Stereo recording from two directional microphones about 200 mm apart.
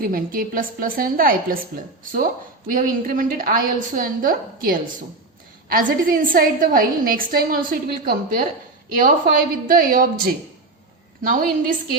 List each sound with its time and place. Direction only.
0.0 s a woman's voice: 45° right (ahead or behind)